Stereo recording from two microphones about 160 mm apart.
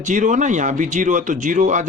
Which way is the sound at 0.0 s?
50° right (ahead or behind).